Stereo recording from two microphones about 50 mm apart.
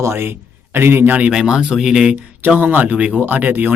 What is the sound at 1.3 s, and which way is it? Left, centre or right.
Speech, centre.